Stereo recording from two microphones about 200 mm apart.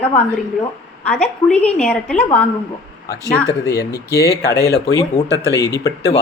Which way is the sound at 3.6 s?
55° left (ahead or behind).